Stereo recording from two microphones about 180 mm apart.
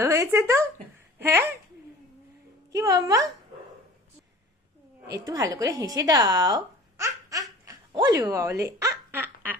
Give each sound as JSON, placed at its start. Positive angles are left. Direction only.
{"t": 0.0, "sound": "speech", "side_deg": -15}
{"t": 2.7, "sound": "a woman's voice", "side_deg": -20}
{"t": 5.1, "sound": "speech", "side_deg": -20}
{"t": 7.6, "sound": "a sound", "side_deg": -20}
{"t": 8.6, "sound": "speech", "side_deg": -15}